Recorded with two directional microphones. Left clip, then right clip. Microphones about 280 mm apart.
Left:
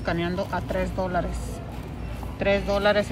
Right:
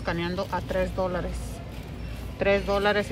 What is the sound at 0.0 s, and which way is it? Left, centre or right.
Speech, centre.